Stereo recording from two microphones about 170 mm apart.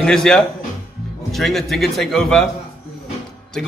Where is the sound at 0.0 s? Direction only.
5° left (ahead or behind).